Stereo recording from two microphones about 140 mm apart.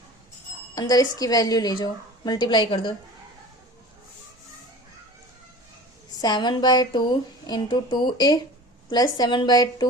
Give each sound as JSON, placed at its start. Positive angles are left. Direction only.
{"t": 0.8, "sound": "a woman's voice", "side_deg": 25}
{"t": 6.1, "sound": "a woman's voice", "side_deg": 30}